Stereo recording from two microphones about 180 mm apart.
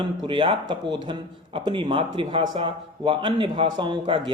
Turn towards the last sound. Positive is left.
turn(degrees=-30)  # may be behind; listen again after turning